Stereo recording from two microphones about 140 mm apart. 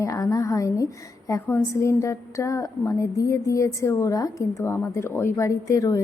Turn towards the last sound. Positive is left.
turn(degrees=25)  # may be behind; listen again after turning